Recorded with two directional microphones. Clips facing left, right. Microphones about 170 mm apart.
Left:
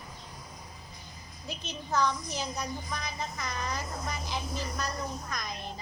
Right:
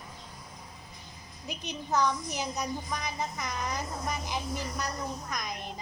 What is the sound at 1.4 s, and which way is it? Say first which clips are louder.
A woman's voice: right 2 dB; 15° right (ahead or behind).